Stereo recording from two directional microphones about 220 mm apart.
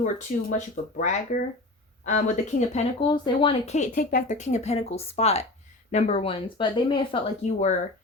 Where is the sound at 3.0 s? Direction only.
20° left (ahead or behind).